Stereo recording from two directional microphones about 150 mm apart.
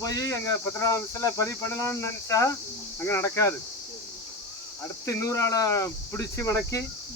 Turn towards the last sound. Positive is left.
turn(degrees=20)  # may be behind; listen again after turning